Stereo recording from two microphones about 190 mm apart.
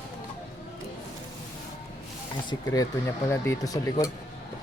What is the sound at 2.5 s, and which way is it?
Speech, 20° left (ahead or behind).